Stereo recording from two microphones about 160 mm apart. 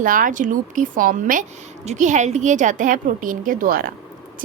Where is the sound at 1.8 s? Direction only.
50° right (ahead or behind).